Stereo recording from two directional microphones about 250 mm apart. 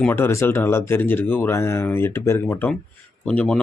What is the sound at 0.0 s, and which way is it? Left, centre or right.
Speech, centre.